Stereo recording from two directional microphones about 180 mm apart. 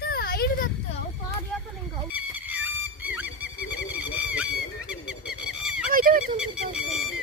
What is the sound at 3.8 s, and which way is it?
Bird, 10° right (ahead or behind).